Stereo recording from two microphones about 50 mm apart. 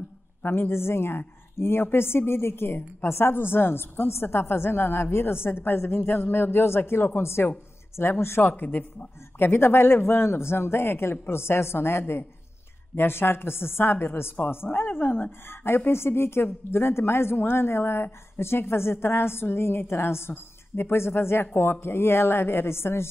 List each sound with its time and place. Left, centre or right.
0.4 s a woman's voice: left
8.4 s speech: left
9.4 s a woman's voice: left
15.9 s a woman's voice: left